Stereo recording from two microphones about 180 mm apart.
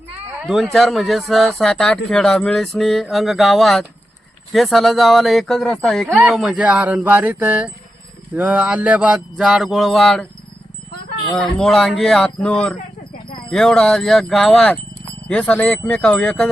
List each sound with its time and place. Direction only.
0.4 s speech: centre (ahead or behind)
11.3 s speech: 5° left (ahead or behind)